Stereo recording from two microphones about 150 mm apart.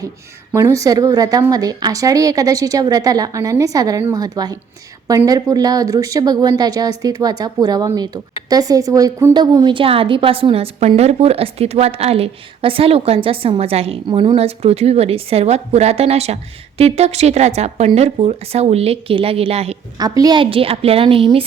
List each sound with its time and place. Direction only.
0.5 s a woman's voice: 20° right (ahead or behind); by 19.7 s 40° right (ahead or behind)
20.0 s a woman's voice: 25° right (ahead or behind)